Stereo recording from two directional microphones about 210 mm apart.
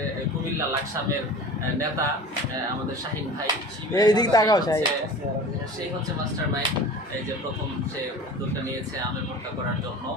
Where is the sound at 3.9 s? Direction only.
20° left (ahead or behind).